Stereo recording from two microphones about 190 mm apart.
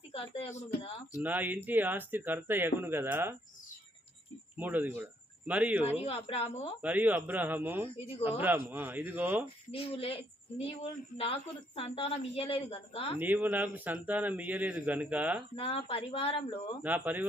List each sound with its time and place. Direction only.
0.1 s speech: 30° left (ahead or behind)
1.2 s a man's voice: 10° right (ahead or behind)
4.5 s a man's voice: 10° right (ahead or behind)
6.1 s speech: 30° left (ahead or behind)
6.8 s a man's voice: 10° right (ahead or behind)
9.7 s a woman's voice: 30° left (ahead or behind)
11.2 s a woman's voice: 30° left (ahead or behind)
13.1 s a man's voice: 10° right (ahead or behind)
15.5 s a woman's voice: 30° left (ahead or behind)
16.8 s a man's voice: 10° right (ahead or behind)